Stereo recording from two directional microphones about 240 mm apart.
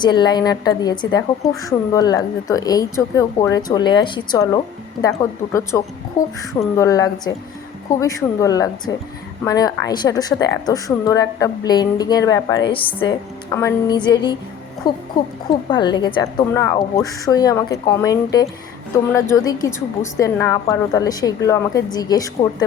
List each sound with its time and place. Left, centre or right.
0.0 s a woman's voice: centre
5.7 s a woman's voice: centre
6.2 s a sound: left
6.7 s a woman's voice: centre